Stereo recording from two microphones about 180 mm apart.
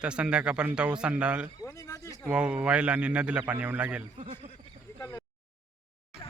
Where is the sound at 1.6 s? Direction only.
20° left (ahead or behind).